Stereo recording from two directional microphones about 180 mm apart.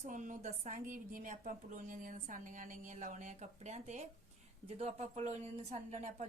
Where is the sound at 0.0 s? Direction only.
45° right (ahead or behind).